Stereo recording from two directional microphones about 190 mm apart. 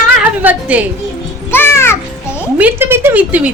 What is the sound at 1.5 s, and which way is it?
Music, 15° left (ahead or behind).